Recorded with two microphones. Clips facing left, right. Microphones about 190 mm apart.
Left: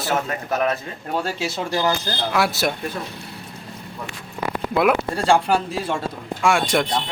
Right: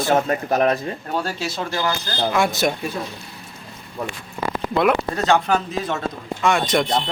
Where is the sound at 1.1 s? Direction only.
10° left (ahead or behind).